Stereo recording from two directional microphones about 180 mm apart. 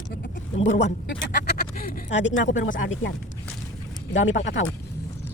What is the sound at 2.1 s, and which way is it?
Speech, 90° left.